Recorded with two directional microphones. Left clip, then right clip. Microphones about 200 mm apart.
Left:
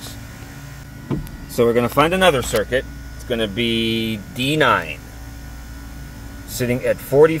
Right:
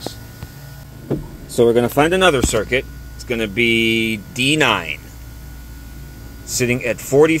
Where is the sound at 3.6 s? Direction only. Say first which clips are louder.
Right 5 dB; 40° left (ahead or behind).